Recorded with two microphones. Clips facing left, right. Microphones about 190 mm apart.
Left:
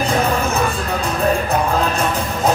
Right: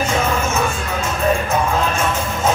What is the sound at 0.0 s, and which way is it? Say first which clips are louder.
Music: left 1 dB; 35° left (ahead or behind).